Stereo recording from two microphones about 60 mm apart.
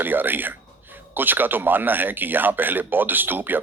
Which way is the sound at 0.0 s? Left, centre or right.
Right.